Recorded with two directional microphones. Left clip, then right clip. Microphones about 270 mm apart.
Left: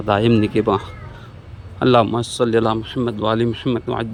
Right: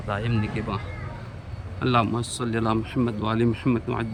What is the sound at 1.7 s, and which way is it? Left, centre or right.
Speech, centre.